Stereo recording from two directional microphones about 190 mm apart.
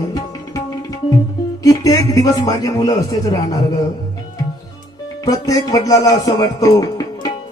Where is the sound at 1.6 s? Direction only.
20° left (ahead or behind).